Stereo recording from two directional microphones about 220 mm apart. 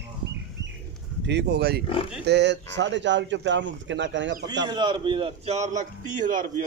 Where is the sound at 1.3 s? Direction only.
50° right (ahead or behind).